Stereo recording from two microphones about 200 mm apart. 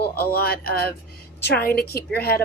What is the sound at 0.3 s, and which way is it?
A woman's voice, 50° left (ahead or behind).